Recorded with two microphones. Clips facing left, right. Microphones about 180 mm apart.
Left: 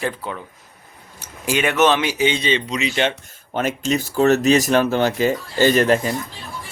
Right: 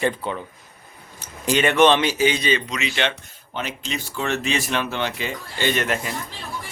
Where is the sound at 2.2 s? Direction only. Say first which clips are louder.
Left 1 dB; 25° left (ahead or behind).